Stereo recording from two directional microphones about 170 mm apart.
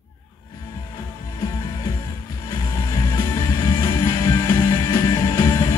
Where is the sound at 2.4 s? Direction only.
20° left (ahead or behind).